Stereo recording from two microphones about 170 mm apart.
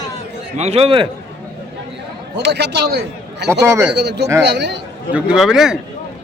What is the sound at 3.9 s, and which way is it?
Speech, 85° right.